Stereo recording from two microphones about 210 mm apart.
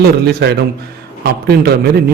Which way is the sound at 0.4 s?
55° right (ahead or behind).